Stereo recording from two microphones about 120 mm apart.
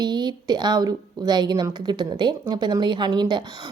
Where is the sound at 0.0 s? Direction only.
35° right (ahead or behind).